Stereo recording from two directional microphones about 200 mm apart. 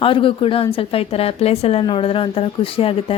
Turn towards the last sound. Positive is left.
turn(degrees=25)  # may be behind; listen again after turning